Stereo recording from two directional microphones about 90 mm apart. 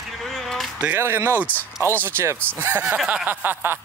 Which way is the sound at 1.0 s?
25° right (ahead or behind).